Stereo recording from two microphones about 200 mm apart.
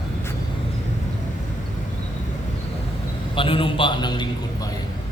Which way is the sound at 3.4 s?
25° left (ahead or behind).